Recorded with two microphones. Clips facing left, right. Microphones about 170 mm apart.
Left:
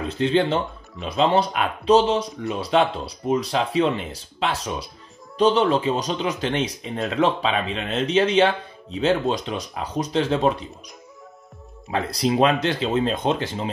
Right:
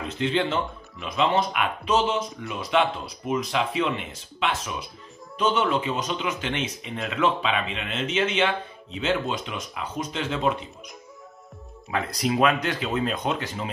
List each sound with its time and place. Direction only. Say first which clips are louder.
0.1 s speech: left 5 dB; 35° left (ahead or behind)
11.9 s speech: left 3 dB; 30° left (ahead or behind)